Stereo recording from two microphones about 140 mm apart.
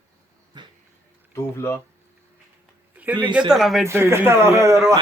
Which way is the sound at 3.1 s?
35° right (ahead or behind).